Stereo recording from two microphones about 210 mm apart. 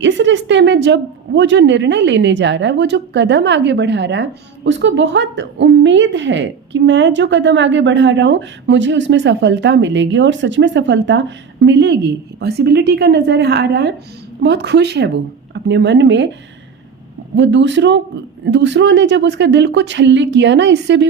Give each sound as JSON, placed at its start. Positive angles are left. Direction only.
{"t": 0.0, "sound": "a woman's voice", "side_deg": -60}
{"t": 17.3, "sound": "a woman's voice", "side_deg": -60}